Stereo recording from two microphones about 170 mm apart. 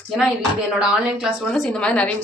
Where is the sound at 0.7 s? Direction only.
5° right (ahead or behind).